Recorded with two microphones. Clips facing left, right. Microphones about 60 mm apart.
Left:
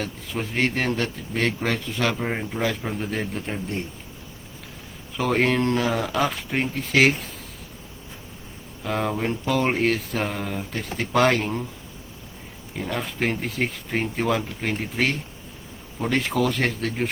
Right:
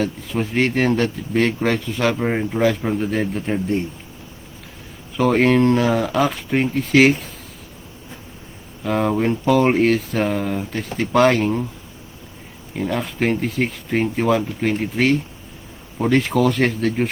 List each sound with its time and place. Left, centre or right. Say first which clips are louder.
0.0 s speech: right 7 dB; centre
5.1 s speech: right 6 dB; centre
8.8 s speech: right 6 dB; centre
12.7 s speech: right 5 dB; centre